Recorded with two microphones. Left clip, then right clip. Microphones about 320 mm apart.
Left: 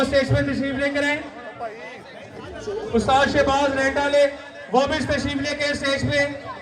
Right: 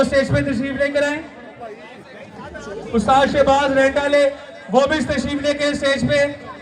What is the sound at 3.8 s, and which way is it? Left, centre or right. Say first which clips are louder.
A man's voice: right 3 dB; centre.